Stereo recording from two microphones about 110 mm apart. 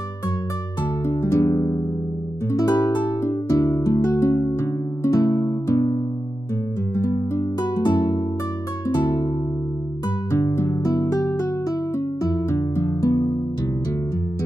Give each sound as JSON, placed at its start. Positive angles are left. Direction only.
{"t": 1.0, "sound": "music", "side_deg": 25}
{"t": 7.0, "sound": "music", "side_deg": 30}
{"t": 10.3, "sound": "music", "side_deg": 25}